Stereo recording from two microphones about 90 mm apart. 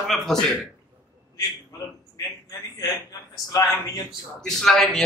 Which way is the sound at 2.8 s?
45° left (ahead or behind).